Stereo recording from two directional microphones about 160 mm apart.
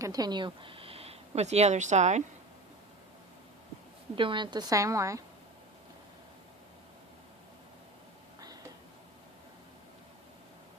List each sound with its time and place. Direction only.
0.0 s speech: 25° right (ahead or behind); by 2.2 s 45° right (ahead or behind)
4.1 s a woman's voice: 30° right (ahead or behind)